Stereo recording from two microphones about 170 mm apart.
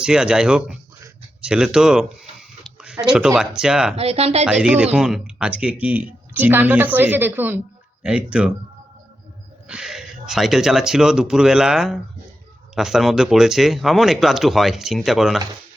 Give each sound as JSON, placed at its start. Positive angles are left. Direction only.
{"t": 0.0, "sound": "speech", "side_deg": -5}
{"t": 3.9, "sound": "speech", "side_deg": -35}
{"t": 4.4, "sound": "speech", "side_deg": -5}
{"t": 9.6, "sound": "speech", "side_deg": -5}